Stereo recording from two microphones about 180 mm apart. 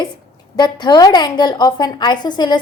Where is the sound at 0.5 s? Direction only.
25° left (ahead or behind).